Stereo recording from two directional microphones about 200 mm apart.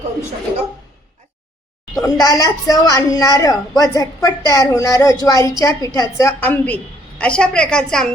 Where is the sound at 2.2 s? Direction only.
15° left (ahead or behind).